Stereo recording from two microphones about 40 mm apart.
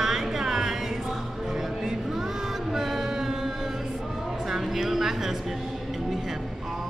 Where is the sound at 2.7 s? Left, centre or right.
Centre.